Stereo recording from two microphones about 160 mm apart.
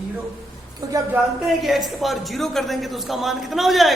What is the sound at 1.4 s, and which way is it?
A man's voice, centre (ahead or behind).